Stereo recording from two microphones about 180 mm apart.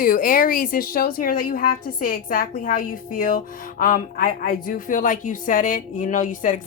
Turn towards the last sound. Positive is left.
turn(degrees=45)  # may be behind; listen again after turning